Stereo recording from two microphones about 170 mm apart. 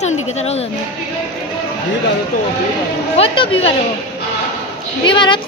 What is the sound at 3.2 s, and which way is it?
Speech, 35° left (ahead or behind).